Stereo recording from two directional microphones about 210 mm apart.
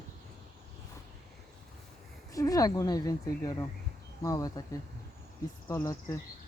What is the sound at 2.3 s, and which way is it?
Speech, 15° left (ahead or behind).